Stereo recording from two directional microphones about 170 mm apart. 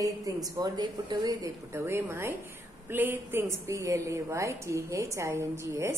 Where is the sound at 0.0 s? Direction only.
20° right (ahead or behind).